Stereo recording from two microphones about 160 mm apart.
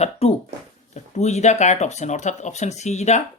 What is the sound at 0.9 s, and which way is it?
Speech, 45° left (ahead or behind).